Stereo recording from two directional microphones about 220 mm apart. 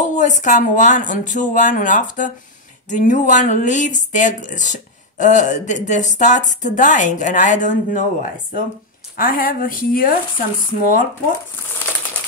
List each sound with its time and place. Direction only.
0.0 s speech: 35° left (ahead or behind)